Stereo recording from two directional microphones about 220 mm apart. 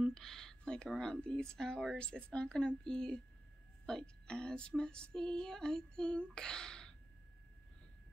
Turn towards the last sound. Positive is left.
turn(degrees=5)  # may be behind; listen again after turning